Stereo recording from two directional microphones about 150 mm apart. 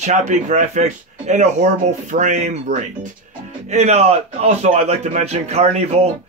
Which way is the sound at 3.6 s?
50° right (ahead or behind).